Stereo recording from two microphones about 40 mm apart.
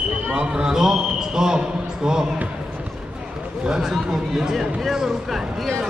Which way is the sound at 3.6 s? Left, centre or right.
Centre.